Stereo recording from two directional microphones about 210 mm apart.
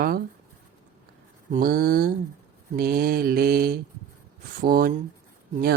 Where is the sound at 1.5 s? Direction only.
45° right (ahead or behind).